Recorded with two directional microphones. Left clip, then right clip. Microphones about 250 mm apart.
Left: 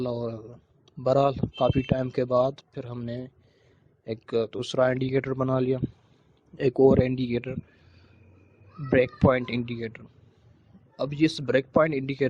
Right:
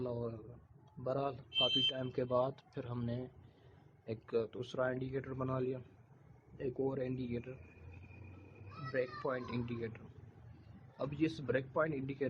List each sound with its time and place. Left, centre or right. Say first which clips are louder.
0.0 s speech: left 11 dB; left
8.9 s speech: left 16 dB; left